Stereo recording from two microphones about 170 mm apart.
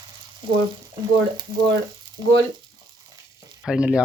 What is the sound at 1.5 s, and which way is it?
Speech, 30° right (ahead or behind).